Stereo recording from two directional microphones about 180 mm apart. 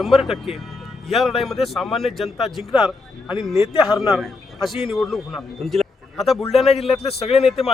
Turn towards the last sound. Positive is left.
turn(degrees=0)  # may be behind; listen again after turning